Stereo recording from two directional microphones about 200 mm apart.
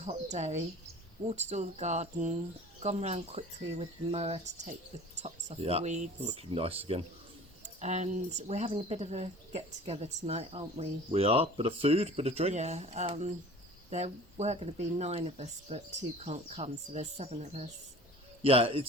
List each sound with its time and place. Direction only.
0.0 s speech: 35° right (ahead or behind)